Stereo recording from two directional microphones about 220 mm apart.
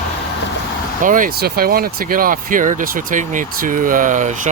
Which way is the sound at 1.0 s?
35° right (ahead or behind).